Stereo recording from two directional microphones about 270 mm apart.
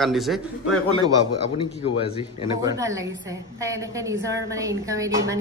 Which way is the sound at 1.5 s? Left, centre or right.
Centre.